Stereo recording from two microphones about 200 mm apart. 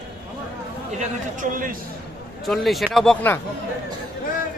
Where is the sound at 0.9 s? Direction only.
40° right (ahead or behind).